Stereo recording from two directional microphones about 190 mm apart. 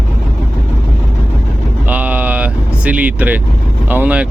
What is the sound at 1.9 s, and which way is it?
Vehicle, 10° right (ahead or behind).